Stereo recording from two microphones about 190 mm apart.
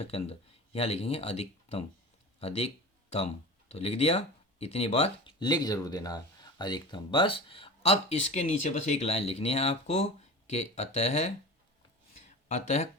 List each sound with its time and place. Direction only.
0.0 s speech: 30° left (ahead or behind)
2.4 s a sound: 30° left (ahead or behind)
3.7 s speech: 35° left (ahead or behind)
12.5 s speech: 35° left (ahead or behind)